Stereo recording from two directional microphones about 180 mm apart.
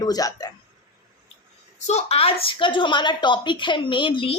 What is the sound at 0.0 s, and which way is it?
Speech, 20° left (ahead or behind).